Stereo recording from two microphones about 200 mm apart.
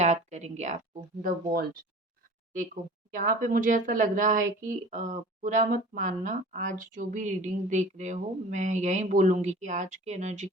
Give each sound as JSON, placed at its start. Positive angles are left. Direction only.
{"t": 0.0, "sound": "a woman's voice", "side_deg": -35}
{"t": 1.5, "sound": "speech", "side_deg": -50}
{"t": 3.1, "sound": "a woman's voice", "side_deg": -40}